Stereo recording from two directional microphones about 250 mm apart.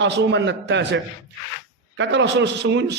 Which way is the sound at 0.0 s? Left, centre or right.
Right.